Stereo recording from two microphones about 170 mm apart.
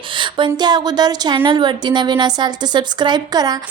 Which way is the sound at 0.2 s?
30° right (ahead or behind).